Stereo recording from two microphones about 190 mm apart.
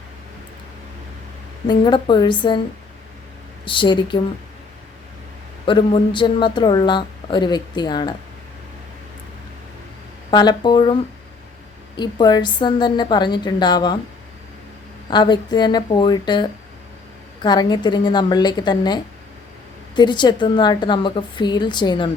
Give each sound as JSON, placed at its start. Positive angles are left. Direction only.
{"t": 1.6, "sound": "a woman's voice", "side_deg": 25}
{"t": 3.7, "sound": "a woman's voice", "side_deg": 25}
{"t": 5.6, "sound": "a woman's voice", "side_deg": 25}
{"t": 10.3, "sound": "a woman's voice", "side_deg": 20}
{"t": 11.9, "sound": "a woman's voice", "side_deg": 20}
{"t": 15.1, "sound": "a woman's voice", "side_deg": 25}
{"t": 20.0, "sound": "a woman's voice", "side_deg": 25}